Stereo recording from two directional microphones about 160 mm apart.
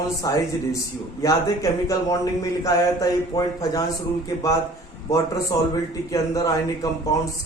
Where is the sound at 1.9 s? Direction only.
20° left (ahead or behind).